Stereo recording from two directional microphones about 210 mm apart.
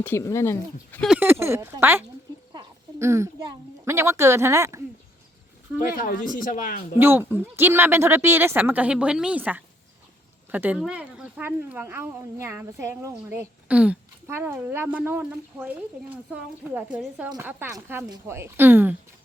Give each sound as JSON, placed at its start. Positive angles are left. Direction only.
{"t": 0.0, "sound": "speech", "side_deg": 15}
{"t": 1.1, "sound": "speech", "side_deg": -10}
{"t": 6.0, "sound": "speech", "side_deg": 40}
{"t": 7.0, "sound": "speech", "side_deg": -10}